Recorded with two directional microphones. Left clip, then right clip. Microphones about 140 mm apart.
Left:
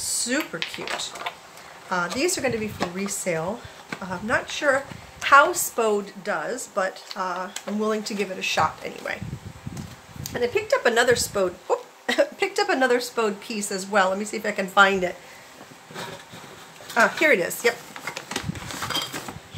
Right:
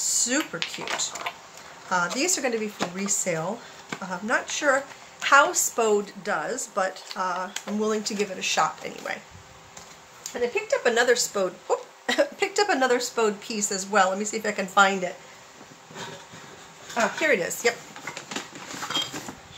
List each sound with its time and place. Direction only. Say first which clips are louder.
0.0 s speech: right 1 dB; centre (ahead or behind)
10.2 s speech: left 2 dB; 25° left (ahead or behind); by 15.0 s 5° left (ahead or behind)
16.9 s speech: left 5 dB; 40° left (ahead or behind)
17.3 s a woman's voice: left 3 dB; 15° left (ahead or behind)